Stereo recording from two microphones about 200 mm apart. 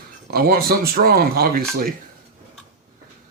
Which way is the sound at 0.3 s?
50° right (ahead or behind).